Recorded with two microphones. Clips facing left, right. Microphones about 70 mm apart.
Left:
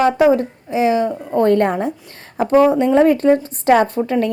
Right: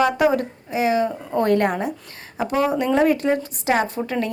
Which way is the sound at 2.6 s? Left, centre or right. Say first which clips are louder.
Left 5 dB; left.